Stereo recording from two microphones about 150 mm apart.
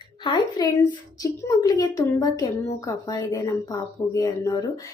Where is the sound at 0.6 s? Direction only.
25° left (ahead or behind).